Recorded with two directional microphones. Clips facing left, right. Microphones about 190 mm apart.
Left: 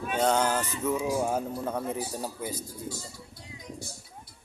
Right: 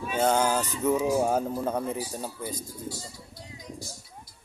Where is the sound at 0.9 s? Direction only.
40° right (ahead or behind).